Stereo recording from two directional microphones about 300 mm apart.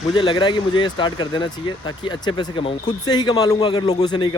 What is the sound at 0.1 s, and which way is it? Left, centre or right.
Speech, centre.